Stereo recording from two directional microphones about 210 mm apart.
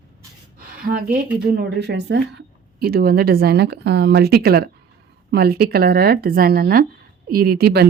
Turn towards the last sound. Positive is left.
turn(degrees=-50)  # may be behind; listen again after turning